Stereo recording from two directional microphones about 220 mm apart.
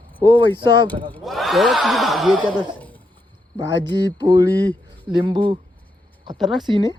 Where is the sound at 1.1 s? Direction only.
Centre (ahead or behind).